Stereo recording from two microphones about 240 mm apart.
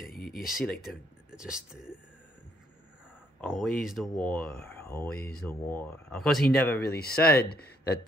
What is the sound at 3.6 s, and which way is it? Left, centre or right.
Speech, centre.